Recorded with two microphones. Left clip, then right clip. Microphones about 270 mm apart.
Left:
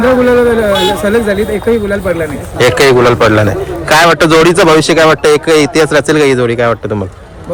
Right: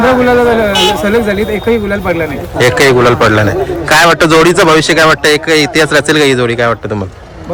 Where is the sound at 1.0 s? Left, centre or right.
Centre.